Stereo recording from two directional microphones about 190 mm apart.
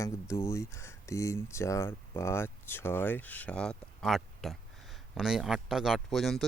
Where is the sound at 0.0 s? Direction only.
15° left (ahead or behind).